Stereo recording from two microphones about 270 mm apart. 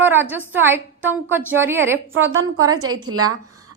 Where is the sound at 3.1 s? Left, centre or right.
Right.